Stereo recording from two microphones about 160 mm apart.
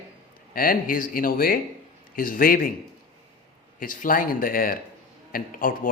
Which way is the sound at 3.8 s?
60° left (ahead or behind).